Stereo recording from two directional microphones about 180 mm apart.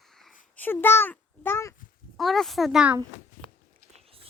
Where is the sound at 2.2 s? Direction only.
Centre (ahead or behind).